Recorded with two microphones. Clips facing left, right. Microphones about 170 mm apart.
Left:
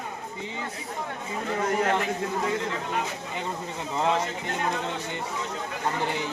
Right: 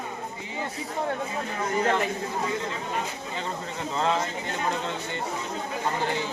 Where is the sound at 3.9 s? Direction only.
15° left (ahead or behind).